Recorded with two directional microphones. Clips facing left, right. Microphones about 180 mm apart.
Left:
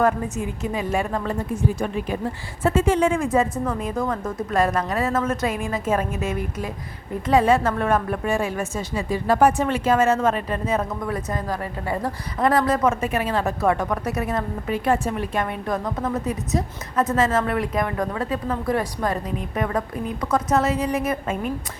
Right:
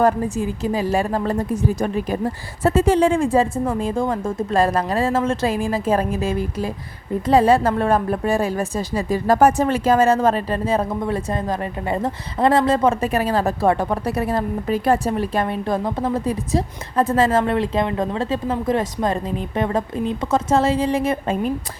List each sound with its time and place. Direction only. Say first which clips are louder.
0.0 s a woman's voice: right 3 dB; 30° right (ahead or behind)